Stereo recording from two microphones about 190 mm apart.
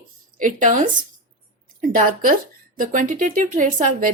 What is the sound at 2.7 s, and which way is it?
Speech, 45° right (ahead or behind).